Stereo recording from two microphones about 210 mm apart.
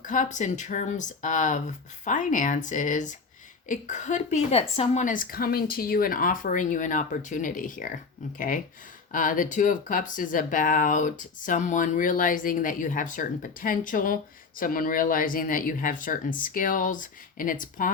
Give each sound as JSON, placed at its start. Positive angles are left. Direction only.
{"t": 0.0, "sound": "speech", "side_deg": 35}